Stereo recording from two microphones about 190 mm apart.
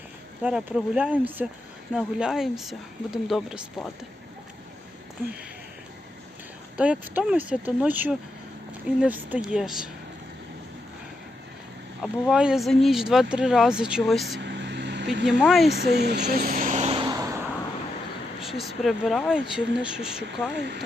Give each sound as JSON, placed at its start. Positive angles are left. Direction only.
{"t": 0.4, "sound": "speech", "side_deg": -5}
{"t": 6.7, "sound": "speech", "side_deg": -5}
{"t": 12.0, "sound": "speech", "side_deg": 0}
{"t": 14.3, "sound": "vehicle", "side_deg": -65}
{"t": 15.3, "sound": "speech", "side_deg": 0}
{"t": 15.9, "sound": "vehicle", "side_deg": -60}
{"t": 18.3, "sound": "speech", "side_deg": 0}
{"t": 20.6, "sound": "speech", "side_deg": -65}